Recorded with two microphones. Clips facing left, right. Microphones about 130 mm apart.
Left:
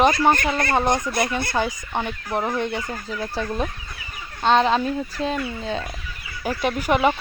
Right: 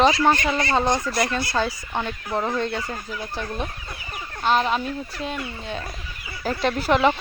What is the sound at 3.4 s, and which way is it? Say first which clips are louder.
Speech: left 4 dB; 35° left (ahead or behind).